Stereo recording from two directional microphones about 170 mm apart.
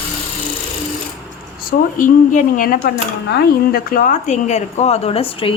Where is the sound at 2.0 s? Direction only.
50° left (ahead or behind).